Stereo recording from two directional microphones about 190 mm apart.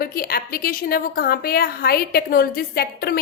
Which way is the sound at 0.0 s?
50° left (ahead or behind).